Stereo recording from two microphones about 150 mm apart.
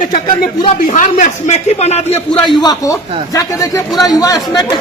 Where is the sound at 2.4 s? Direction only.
30° left (ahead or behind).